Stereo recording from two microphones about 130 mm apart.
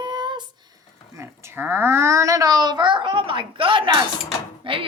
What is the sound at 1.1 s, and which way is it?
A child's voice, 15° right (ahead or behind).